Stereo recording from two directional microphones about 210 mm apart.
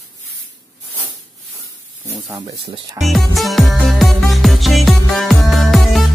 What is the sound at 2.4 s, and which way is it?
Speech, 25° right (ahead or behind).